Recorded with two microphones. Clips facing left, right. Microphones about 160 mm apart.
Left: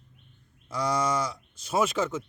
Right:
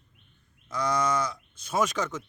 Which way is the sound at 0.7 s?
10° left (ahead or behind).